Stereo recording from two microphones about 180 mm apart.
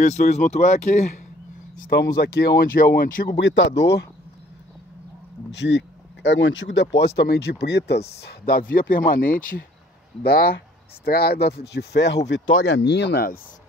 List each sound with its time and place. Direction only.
0.0 s speech: 40° left (ahead or behind)
1.8 s speech: 60° left (ahead or behind)
3.3 s speech: 85° left; by 4.0 s 65° left (ahead or behind)
5.5 s speech: 80° left
12.3 s speech: 85° left; by 13.4 s 60° left (ahead or behind)